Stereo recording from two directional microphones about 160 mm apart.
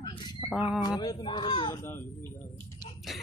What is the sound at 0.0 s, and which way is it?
Music, 30° left (ahead or behind).